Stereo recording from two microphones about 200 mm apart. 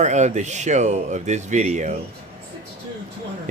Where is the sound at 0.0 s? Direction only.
35° right (ahead or behind).